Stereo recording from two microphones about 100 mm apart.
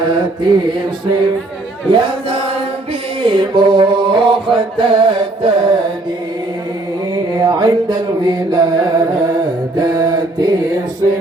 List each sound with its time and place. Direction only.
0.0 s mantra: 50° right (ahead or behind)
1.9 s a sound: 60° right (ahead or behind)
3.2 s mantra: 55° right (ahead or behind)
7.3 s music: 50° right (ahead or behind)